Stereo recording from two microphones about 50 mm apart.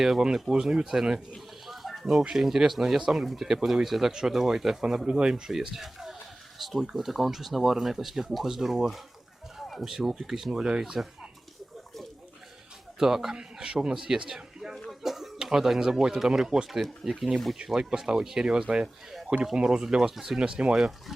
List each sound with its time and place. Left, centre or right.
0.0 s speech: centre
9.6 s a sound: centre
9.8 s speech: centre
13.0 s speech: centre
16.6 s speech: centre
17.7 s speech: centre